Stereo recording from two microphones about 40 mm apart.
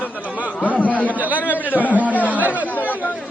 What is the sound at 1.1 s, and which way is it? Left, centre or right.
Chatter, right.